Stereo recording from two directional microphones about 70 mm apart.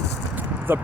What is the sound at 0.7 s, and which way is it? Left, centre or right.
Speech, right.